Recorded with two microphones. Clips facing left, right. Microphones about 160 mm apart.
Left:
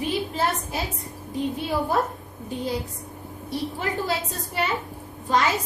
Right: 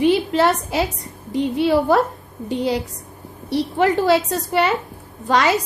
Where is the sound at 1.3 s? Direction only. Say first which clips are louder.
Right 9 dB; 80° right.